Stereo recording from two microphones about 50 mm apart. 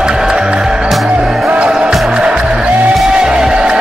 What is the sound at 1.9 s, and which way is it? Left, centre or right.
Music, centre.